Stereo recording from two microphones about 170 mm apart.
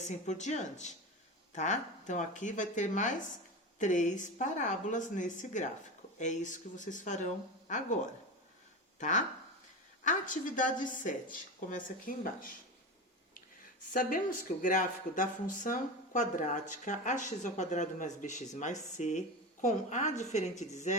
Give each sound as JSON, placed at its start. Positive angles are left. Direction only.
{"t": 0.0, "sound": "speech", "side_deg": 45}
{"t": 13.9, "sound": "speech", "side_deg": 55}